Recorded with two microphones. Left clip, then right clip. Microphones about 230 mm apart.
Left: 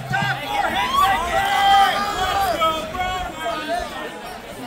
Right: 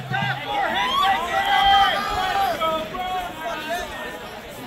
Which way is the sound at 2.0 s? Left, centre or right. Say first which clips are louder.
Left 1 dB; left.